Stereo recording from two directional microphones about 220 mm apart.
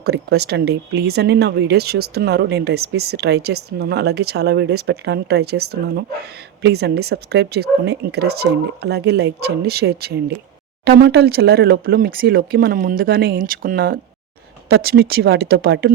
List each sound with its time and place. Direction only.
0.0 s speech: 50° right (ahead or behind)